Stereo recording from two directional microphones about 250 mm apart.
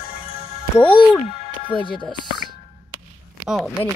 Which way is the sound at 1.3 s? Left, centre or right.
Centre.